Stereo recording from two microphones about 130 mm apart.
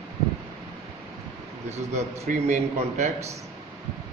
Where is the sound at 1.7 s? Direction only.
60° right (ahead or behind).